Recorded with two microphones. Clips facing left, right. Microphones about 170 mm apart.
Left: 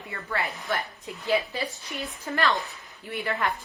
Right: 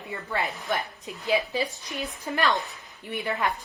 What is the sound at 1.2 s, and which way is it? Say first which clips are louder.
Speech: right 1 dB; 15° right (ahead or behind).